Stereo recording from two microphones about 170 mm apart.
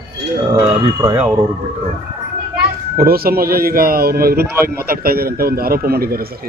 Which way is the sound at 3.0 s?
60° right (ahead or behind).